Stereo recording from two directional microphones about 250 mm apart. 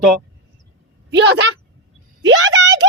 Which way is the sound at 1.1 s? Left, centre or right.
Right.